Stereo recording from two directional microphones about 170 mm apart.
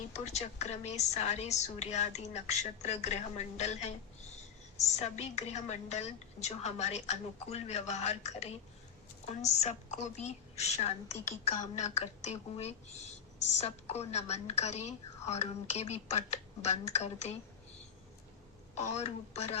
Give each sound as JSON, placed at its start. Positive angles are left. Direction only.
{"t": 0.3, "sound": "a woman's voice", "side_deg": 40}
{"t": 4.9, "sound": "a woman's voice", "side_deg": 40}
{"t": 18.8, "sound": "a woman's voice", "side_deg": 40}